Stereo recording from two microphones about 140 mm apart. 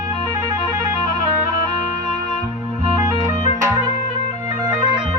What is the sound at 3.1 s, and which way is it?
Organ, 20° right (ahead or behind).